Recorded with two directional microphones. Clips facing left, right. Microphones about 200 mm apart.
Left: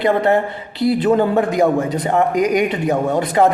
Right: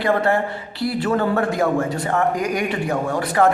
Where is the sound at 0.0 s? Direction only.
20° left (ahead or behind).